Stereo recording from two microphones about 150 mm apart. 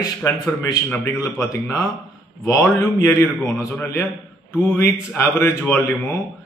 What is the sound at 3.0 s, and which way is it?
Speech, 20° left (ahead or behind).